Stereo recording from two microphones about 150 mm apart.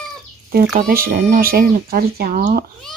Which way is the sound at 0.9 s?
85° right.